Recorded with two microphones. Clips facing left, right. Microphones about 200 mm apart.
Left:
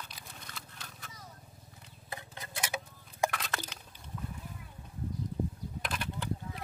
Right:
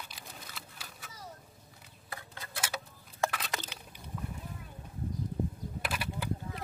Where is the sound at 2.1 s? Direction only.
20° left (ahead or behind).